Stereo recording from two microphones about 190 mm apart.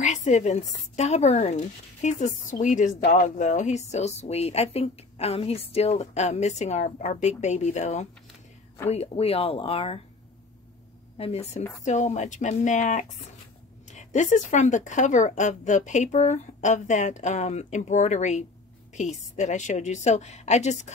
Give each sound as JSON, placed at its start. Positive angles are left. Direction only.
{"t": 0.0, "sound": "a woman's voice", "side_deg": 40}
{"t": 11.1, "sound": "a woman's voice", "side_deg": 35}